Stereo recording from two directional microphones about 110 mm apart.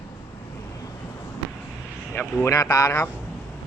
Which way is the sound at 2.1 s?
25° left (ahead or behind).